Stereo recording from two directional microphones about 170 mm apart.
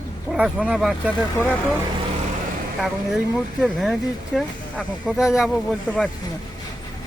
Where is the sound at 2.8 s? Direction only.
Centre (ahead or behind).